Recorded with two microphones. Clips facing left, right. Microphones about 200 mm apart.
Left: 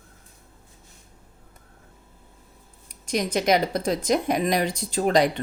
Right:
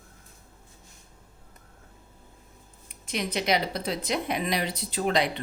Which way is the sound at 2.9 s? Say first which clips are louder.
Left 6 dB; 45° left (ahead or behind).